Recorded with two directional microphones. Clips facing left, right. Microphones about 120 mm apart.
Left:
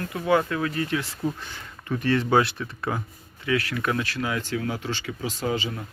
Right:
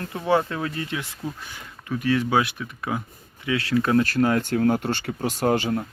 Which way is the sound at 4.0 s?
45° right (ahead or behind).